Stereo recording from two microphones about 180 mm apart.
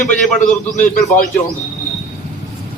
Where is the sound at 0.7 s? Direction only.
45° left (ahead or behind).